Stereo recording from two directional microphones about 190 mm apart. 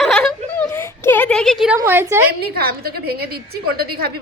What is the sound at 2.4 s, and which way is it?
A woman's voice, 55° right (ahead or behind).